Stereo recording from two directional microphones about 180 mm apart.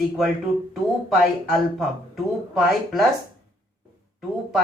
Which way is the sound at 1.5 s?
Centre (ahead or behind).